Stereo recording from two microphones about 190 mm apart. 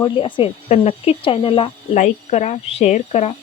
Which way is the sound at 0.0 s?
25° left (ahead or behind).